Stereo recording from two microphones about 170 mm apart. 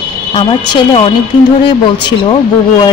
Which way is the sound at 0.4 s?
30° left (ahead or behind).